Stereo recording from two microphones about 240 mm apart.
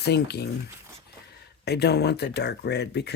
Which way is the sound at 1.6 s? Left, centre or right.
Left.